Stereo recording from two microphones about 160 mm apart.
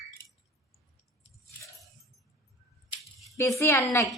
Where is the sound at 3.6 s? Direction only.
20° left (ahead or behind).